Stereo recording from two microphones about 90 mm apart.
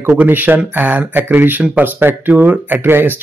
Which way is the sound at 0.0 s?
20° right (ahead or behind).